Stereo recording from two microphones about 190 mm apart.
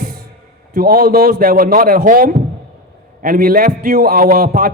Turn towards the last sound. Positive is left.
turn(degrees=-50)  # may be behind; listen again after turning